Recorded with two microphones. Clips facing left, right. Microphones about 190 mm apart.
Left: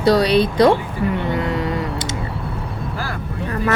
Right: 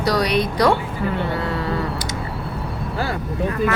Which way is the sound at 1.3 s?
20° left (ahead or behind).